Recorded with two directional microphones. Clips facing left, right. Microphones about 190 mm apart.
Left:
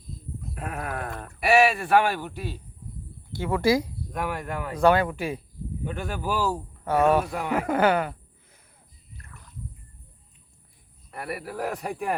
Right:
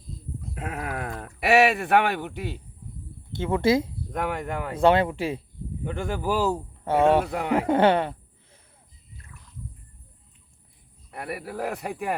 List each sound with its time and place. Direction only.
0.5 s speech: 20° right (ahead or behind)
9.2 s a sound: 65° left (ahead or behind)
11.2 s a man's voice: 20° right (ahead or behind)